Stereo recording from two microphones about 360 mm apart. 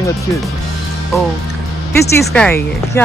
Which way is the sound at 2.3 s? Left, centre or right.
Centre.